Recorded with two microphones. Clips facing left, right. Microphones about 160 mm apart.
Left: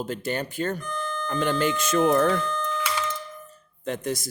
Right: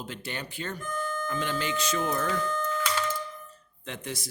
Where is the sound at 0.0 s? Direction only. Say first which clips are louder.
Left 9 dB; 45° left (ahead or behind).